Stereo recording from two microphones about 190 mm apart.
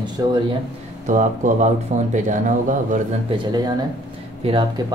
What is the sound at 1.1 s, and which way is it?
Speech, 40° right (ahead or behind).